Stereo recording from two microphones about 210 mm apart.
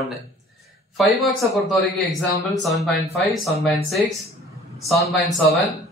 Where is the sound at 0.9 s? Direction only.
Centre (ahead or behind).